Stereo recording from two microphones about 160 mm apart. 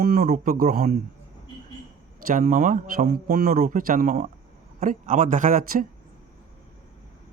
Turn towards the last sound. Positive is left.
turn(degrees=-60)  # may be behind; listen again after turning